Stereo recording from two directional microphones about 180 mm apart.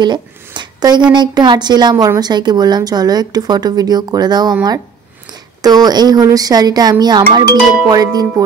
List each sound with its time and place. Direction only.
0.6 s a woman's voice: 25° right (ahead or behind)
5.6 s a woman's voice: 20° right (ahead or behind)